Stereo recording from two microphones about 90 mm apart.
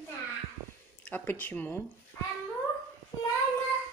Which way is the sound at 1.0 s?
20° left (ahead or behind).